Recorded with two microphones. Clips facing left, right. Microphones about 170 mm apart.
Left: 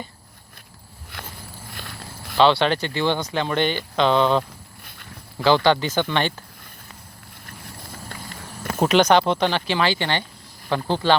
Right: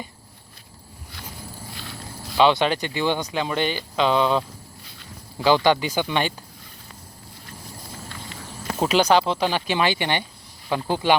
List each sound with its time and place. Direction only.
1.1 s a sound: 55° left (ahead or behind)
2.4 s speech: 15° right (ahead or behind)
4.8 s walk: 55° left (ahead or behind)
5.4 s speech: 15° right (ahead or behind)
8.9 s speech: 5° right (ahead or behind)
9.5 s speech: 15° right (ahead or behind)